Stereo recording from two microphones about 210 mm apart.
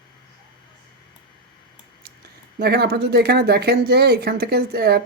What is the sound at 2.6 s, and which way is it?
Speech, 50° right (ahead or behind).